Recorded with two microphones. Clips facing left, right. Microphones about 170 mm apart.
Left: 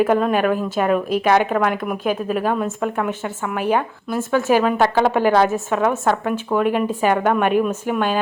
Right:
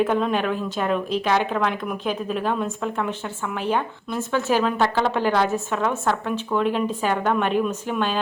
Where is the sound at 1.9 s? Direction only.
10° left (ahead or behind).